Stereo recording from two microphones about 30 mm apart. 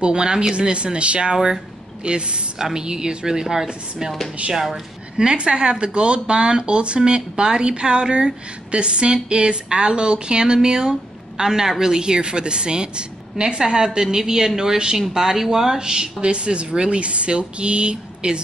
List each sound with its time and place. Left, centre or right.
0.0 s speech: right
2.6 s speech: right
5.1 s speech: right; by 15.8 s centre
15.8 s speech: right
16.2 s speech: right